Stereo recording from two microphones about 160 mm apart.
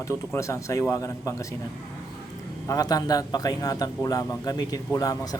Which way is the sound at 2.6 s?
20° left (ahead or behind).